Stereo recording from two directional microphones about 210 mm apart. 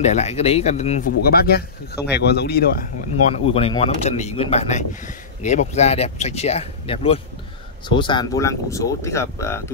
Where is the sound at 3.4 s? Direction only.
25° left (ahead or behind).